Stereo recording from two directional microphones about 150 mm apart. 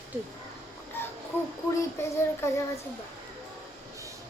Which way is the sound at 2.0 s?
20° left (ahead or behind).